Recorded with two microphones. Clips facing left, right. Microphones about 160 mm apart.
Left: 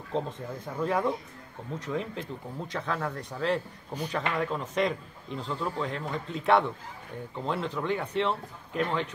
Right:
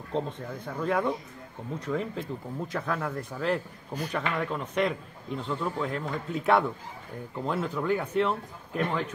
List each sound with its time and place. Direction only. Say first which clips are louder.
0.1 s a man's voice: even; centre (ahead or behind)